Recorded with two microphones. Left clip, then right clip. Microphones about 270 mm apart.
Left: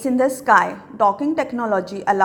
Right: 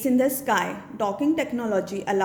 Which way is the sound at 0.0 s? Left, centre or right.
Centre.